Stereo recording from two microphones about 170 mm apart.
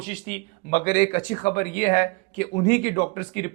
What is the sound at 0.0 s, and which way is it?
Speech, 45° left (ahead or behind).